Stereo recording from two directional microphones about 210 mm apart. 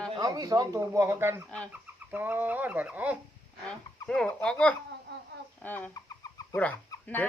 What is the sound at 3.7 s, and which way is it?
Speech, 5° left (ahead or behind).